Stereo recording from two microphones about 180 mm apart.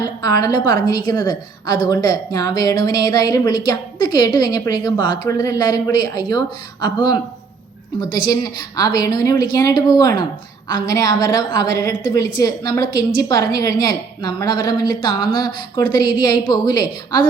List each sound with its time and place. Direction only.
0.2 s a woman's voice: 20° left (ahead or behind)
8.3 s a woman's voice: 20° left (ahead or behind)